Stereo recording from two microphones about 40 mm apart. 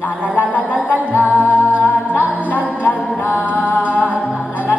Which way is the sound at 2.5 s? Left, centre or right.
Left.